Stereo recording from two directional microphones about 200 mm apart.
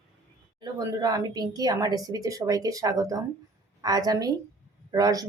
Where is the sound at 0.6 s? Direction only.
20° right (ahead or behind).